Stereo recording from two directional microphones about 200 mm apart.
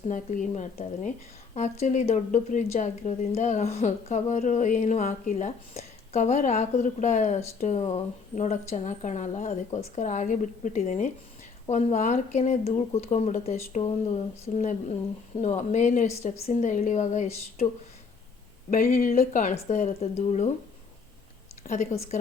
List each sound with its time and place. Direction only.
0.1 s a woman's voice: 40° left (ahead or behind)
18.7 s a woman's voice: 45° left (ahead or behind)
21.7 s speech: 45° left (ahead or behind)